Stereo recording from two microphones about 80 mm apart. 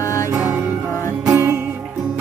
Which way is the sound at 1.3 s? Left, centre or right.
Right.